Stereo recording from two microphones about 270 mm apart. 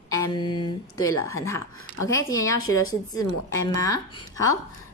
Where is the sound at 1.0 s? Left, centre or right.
Centre.